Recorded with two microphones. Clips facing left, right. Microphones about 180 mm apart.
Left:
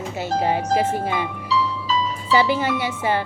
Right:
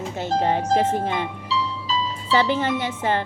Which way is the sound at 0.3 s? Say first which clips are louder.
Even; 10° left (ahead or behind).